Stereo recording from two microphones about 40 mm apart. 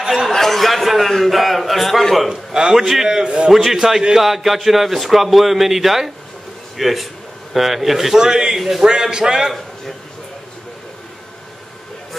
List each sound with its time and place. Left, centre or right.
0.3 s a man's voice: centre
2.2 s a man's voice: centre
8.2 s a man's voice: centre
8.5 s a man's voice: centre
8.8 s a man's voice: centre